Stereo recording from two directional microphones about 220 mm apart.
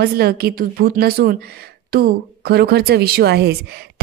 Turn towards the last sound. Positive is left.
turn(degrees=-50)  # may be behind; listen again after turning